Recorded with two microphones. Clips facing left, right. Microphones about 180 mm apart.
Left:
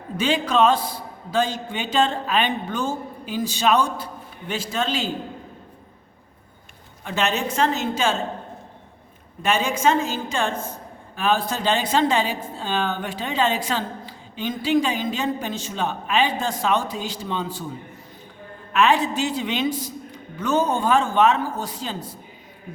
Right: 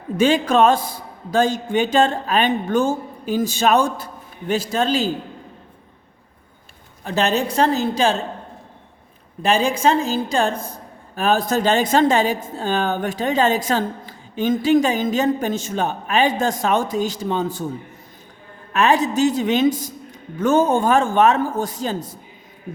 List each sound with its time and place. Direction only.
0.2 s a woman's voice: 45° right (ahead or behind)
7.0 s a woman's voice: 35° right (ahead or behind)
9.4 s a woman's voice: 35° right (ahead or behind)
18.7 s a woman's voice: 40° right (ahead or behind)